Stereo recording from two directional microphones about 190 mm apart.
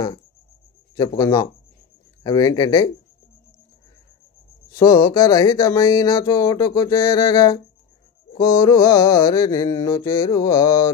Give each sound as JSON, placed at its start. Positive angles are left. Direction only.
{"t": 0.9, "sound": "speech", "side_deg": 20}
{"t": 4.7, "sound": "speech", "side_deg": 15}